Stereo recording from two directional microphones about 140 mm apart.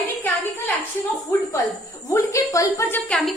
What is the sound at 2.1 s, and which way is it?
Speech, 20° left (ahead or behind).